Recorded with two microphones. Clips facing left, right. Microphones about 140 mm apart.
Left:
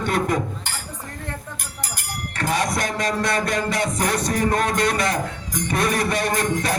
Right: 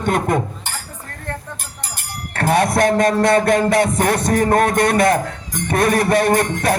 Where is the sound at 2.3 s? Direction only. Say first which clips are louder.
Right 7 dB; 55° right (ahead or behind).